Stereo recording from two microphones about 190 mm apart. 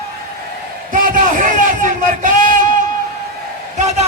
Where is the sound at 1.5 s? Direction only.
45° right (ahead or behind).